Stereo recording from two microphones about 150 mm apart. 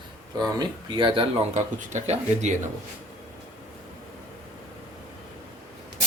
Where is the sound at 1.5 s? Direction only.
50° right (ahead or behind).